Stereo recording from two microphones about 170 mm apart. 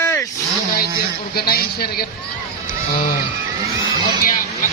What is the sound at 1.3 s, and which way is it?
Speech, 65° left (ahead or behind).